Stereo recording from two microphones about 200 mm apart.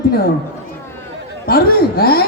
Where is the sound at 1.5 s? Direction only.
50° left (ahead or behind).